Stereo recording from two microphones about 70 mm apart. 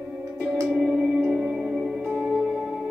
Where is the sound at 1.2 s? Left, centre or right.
Centre.